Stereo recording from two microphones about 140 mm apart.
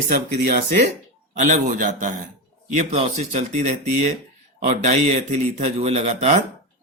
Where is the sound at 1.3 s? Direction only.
70° right (ahead or behind).